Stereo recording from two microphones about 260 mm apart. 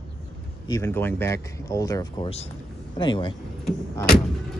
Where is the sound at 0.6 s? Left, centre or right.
Centre.